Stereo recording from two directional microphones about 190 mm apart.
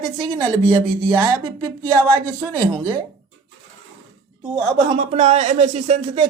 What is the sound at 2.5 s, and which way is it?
Speech, 25° right (ahead or behind).